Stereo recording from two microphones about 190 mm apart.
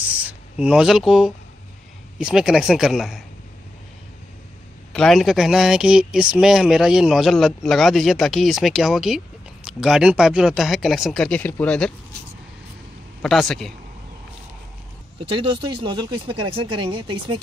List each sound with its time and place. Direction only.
0.0 s a sound: 10° right (ahead or behind)
2.1 s speech: 5° right (ahead or behind)
4.9 s speech: centre (ahead or behind)
13.2 s speech: centre (ahead or behind)
15.2 s speech: 30° right (ahead or behind)